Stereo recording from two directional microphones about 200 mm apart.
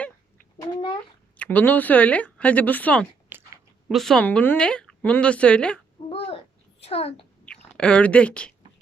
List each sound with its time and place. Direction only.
0.7 s a sound: 25° left (ahead or behind)
1.4 s speech: 10° left (ahead or behind)
3.3 s chewing: 10° right (ahead or behind)
3.8 s speech: centre (ahead or behind)
6.1 s babbling: 30° left (ahead or behind)
6.8 s a child's voice: 30° left (ahead or behind)
7.4 s speech: 5° left (ahead or behind)